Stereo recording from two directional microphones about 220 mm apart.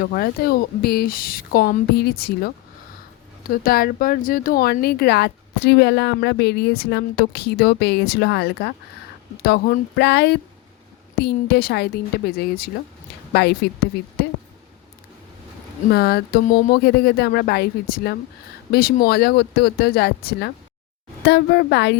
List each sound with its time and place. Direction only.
0.0 s speech: 40° left (ahead or behind)
3.5 s speech: 40° left (ahead or behind)
15.9 s speech: 45° left (ahead or behind)